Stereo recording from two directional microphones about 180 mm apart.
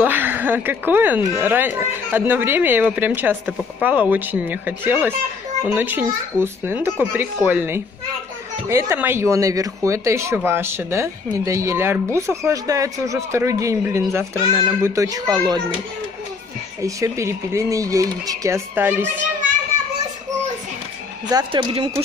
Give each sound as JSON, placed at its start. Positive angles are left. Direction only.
{"t": 0.0, "sound": "a child's voice", "side_deg": -10}
{"t": 16.8, "sound": "speech", "side_deg": -15}
{"t": 21.3, "sound": "a child's voice", "side_deg": -25}